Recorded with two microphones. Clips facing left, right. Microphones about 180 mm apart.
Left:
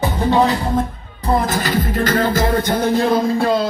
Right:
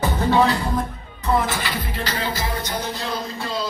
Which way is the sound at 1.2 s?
35° left (ahead or behind).